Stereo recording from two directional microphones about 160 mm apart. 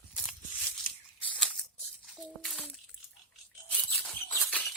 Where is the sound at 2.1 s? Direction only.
Centre (ahead or behind).